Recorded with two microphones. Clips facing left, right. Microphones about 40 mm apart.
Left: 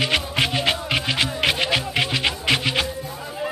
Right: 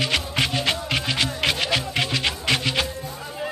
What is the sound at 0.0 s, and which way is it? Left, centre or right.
Music, centre.